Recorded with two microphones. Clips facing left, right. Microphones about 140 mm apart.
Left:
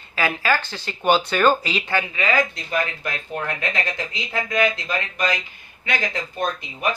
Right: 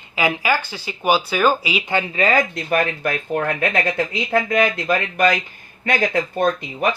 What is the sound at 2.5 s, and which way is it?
Speech, 60° right (ahead or behind).